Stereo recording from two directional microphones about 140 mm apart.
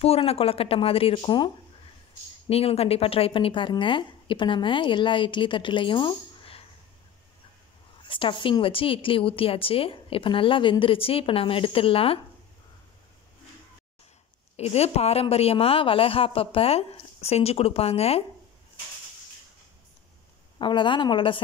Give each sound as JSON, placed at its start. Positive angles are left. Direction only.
{"t": 0.0, "sound": "a woman's voice", "side_deg": 45}
{"t": 2.5, "sound": "a woman's voice", "side_deg": 45}
{"t": 8.0, "sound": "a woman's voice", "side_deg": 35}
{"t": 14.6, "sound": "a woman's voice", "side_deg": 45}
{"t": 20.5, "sound": "a woman's voice", "side_deg": 35}